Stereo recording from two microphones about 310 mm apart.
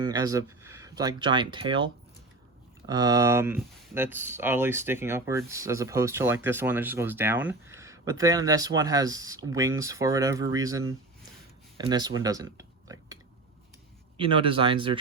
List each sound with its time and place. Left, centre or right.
0.0 s speech: centre
2.8 s speech: centre
14.2 s speech: centre